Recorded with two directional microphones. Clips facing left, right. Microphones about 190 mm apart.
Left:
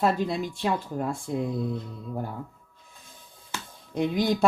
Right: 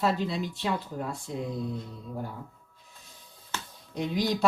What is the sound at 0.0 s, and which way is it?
Speech, 50° left (ahead or behind).